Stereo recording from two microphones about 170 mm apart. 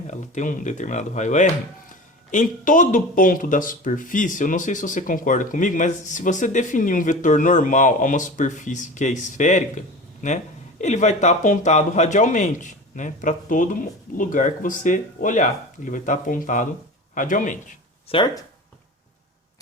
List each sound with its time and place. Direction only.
0.1 s speech: 45° left (ahead or behind)
18.1 s speech: 30° left (ahead or behind)